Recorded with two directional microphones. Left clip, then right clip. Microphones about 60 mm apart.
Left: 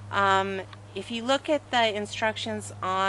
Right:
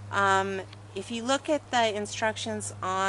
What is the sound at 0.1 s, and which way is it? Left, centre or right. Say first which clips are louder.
A woman's voice: left 1 dB; left.